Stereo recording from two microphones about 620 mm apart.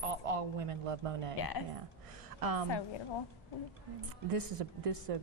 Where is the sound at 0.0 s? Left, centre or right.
Right.